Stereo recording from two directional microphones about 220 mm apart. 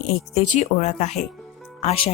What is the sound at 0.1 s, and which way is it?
A woman's voice, 35° left (ahead or behind).